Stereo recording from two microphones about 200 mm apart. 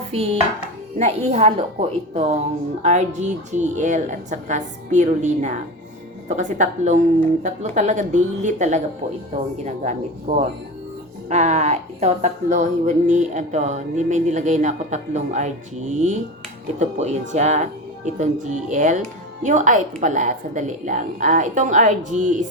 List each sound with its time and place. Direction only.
0.1 s chopping: 30° right (ahead or behind)
0.9 s a woman's voice: 35° right (ahead or behind)
2.8 s a woman's voice: 35° right (ahead or behind)